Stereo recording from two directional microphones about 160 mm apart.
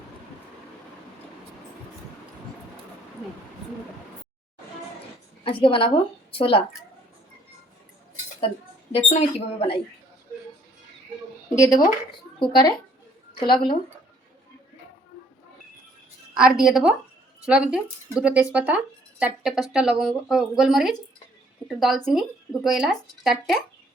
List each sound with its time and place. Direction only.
5.4 s a woman's voice: 35° left (ahead or behind)
9.0 s speech: 40° left (ahead or behind)
11.5 s speech: 20° left (ahead or behind)
16.3 s speech: 5° right (ahead or behind)